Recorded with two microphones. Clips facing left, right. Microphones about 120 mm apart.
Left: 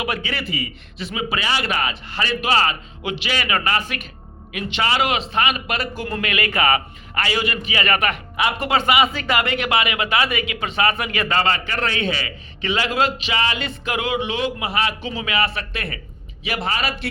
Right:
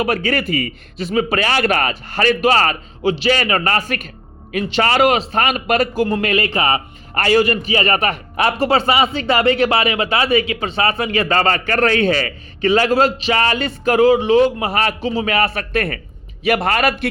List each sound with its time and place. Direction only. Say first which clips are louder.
0.0 s a man's voice: right 7 dB; 40° right (ahead or behind)
6.1 s speech: right 4 dB; 30° right (ahead or behind)
7.1 s a man's voice: right 8 dB; 45° right (ahead or behind)